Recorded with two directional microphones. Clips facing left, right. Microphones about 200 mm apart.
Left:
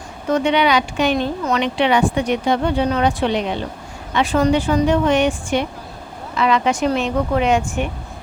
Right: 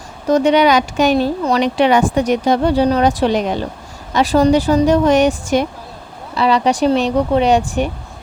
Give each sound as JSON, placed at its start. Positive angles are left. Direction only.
{"t": 0.3, "sound": "speech", "side_deg": -40}